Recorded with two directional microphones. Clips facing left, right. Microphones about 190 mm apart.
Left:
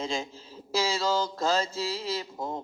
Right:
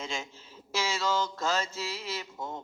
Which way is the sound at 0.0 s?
35° left (ahead or behind).